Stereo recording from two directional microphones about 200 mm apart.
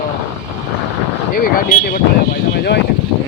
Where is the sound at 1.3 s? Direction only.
45° left (ahead or behind).